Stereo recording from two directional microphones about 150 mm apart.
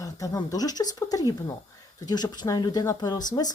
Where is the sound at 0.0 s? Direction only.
25° left (ahead or behind).